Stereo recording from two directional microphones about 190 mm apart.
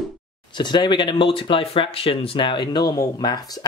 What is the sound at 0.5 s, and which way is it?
Speech, 25° left (ahead or behind).